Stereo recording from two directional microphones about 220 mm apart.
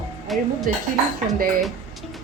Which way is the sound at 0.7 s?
40° right (ahead or behind).